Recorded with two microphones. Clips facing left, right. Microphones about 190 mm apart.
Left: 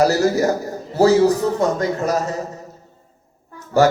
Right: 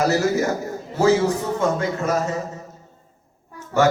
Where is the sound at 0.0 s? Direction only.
35° left (ahead or behind).